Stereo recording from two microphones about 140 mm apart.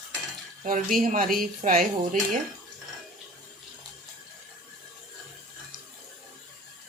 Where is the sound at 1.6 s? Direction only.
70° right (ahead or behind).